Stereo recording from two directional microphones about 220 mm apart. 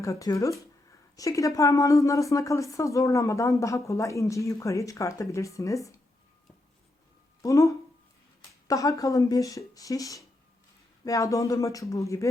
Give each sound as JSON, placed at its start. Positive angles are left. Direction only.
{"t": 0.0, "sound": "speech", "side_deg": 15}
{"t": 7.4, "sound": "speech", "side_deg": 15}